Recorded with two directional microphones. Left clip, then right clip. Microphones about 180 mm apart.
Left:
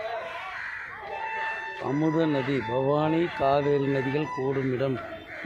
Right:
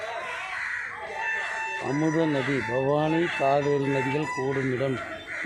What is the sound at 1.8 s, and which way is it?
Speech, 10° right (ahead or behind).